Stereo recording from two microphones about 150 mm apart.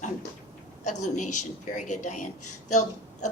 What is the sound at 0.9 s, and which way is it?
A woman's voice, 55° left (ahead or behind).